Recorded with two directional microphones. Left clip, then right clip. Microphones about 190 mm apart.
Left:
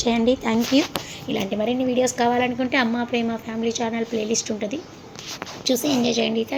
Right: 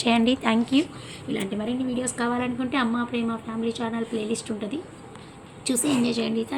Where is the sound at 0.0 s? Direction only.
20° right (ahead or behind).